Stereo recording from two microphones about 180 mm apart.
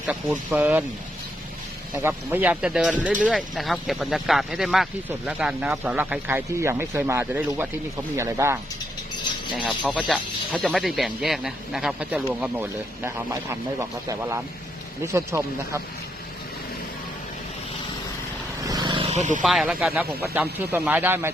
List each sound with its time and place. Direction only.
0.1 s speech: 10° right (ahead or behind)
2.0 s speech: 10° right (ahead or behind)
9.6 s speech: centre (ahead or behind)
18.6 s wild animals: 20° right (ahead or behind); by 19.4 s 40° right (ahead or behind)
19.4 s speech: centre (ahead or behind)